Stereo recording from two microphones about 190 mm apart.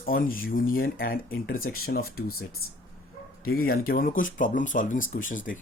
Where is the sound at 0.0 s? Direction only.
50° left (ahead or behind).